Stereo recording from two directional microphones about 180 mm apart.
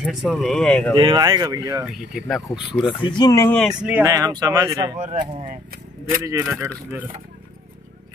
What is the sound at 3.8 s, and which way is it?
Speech, 10° right (ahead or behind).